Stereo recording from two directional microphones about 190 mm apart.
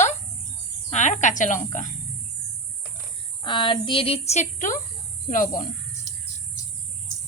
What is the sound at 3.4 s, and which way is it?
Speech, 25° left (ahead or behind).